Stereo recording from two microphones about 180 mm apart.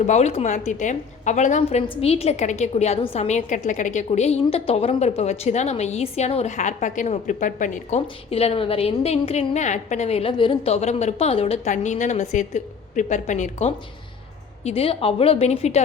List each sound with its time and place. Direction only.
0.0 s a woman's voice: 40° left (ahead or behind)